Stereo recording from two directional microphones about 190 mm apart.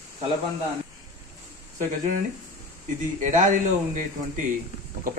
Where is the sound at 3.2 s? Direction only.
40° right (ahead or behind).